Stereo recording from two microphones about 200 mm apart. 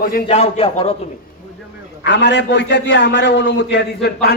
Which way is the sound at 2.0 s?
60° left (ahead or behind).